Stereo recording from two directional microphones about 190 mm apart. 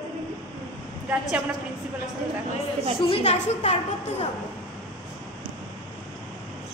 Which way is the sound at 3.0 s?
30° left (ahead or behind).